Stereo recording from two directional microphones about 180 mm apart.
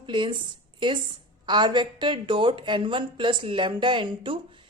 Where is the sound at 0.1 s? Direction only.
25° right (ahead or behind).